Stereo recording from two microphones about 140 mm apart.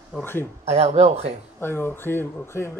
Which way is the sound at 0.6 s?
50° right (ahead or behind).